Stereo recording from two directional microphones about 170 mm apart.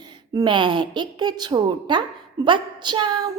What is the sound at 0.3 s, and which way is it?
A woman's voice, 30° right (ahead or behind).